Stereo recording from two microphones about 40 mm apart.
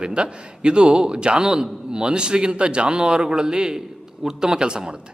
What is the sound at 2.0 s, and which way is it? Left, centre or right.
A man's voice, right.